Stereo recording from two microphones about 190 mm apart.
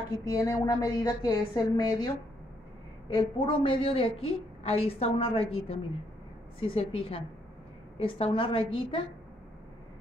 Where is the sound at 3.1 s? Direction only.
25° left (ahead or behind).